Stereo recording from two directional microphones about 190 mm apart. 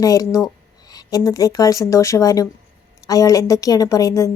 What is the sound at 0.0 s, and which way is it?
Speech, 20° left (ahead or behind).